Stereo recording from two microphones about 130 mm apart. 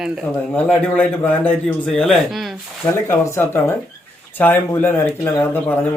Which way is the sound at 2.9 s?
20° left (ahead or behind).